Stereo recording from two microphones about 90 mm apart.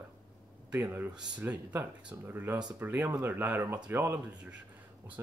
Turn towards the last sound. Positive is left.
turn(degrees=-25)  # may be behind; listen again after turning